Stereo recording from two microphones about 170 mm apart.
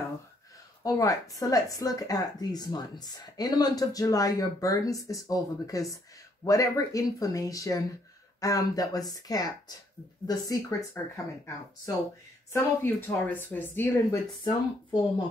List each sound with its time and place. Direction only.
0.8 s speech: 20° left (ahead or behind)
12.5 s speech: 10° left (ahead or behind)
14.4 s speech: 25° left (ahead or behind)